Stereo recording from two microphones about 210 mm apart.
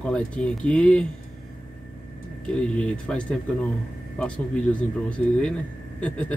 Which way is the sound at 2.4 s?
5° left (ahead or behind).